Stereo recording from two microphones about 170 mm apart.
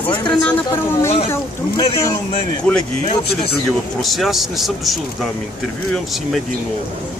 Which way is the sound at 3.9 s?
Centre (ahead or behind).